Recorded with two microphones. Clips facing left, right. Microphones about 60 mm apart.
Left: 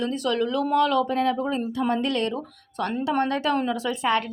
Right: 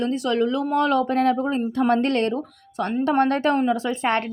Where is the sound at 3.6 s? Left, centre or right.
Right.